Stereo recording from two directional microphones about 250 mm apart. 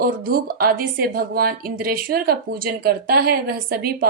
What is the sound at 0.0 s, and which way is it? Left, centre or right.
A woman's voice, right.